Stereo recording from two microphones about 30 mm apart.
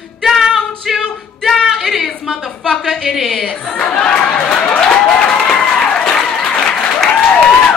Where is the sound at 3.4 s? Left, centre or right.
Left.